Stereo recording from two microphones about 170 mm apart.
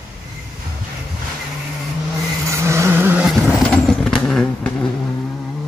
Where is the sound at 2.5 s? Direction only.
15° right (ahead or behind).